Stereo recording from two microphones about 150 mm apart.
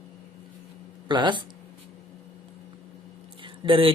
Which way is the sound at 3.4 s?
35° right (ahead or behind).